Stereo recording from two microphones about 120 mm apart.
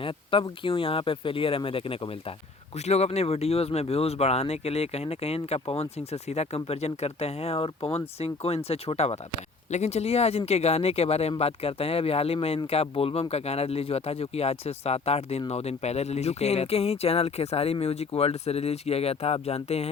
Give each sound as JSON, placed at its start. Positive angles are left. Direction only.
{"t": 0.0, "sound": "speech", "side_deg": 45}
{"t": 2.8, "sound": "speech", "side_deg": 60}